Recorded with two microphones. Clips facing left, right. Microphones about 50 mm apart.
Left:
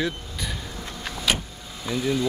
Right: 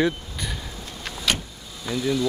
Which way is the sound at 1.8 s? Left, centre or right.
Left.